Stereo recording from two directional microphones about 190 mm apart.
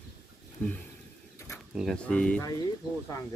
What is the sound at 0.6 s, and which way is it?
Speech, 10° left (ahead or behind).